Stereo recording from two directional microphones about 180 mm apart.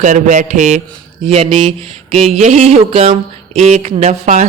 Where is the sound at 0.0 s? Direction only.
45° right (ahead or behind).